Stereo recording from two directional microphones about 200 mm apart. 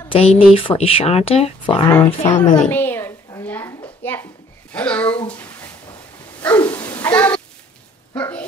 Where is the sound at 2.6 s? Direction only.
10° left (ahead or behind).